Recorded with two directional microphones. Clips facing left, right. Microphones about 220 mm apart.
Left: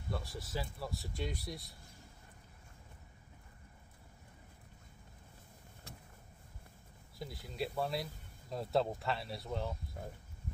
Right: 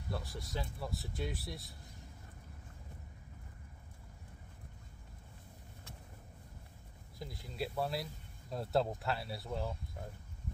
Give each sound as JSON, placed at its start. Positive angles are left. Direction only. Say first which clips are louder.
{"t": 0.1, "sound": "speech", "louder": "left 1 dB", "side_deg": 0}
{"t": 7.2, "sound": "speech", "louder": "left 1 dB", "side_deg": 0}